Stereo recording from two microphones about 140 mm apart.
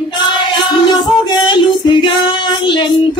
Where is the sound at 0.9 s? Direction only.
35° left (ahead or behind).